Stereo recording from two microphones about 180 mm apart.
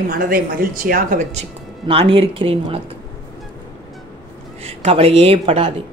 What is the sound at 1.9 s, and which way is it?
Speech, 30° right (ahead or behind).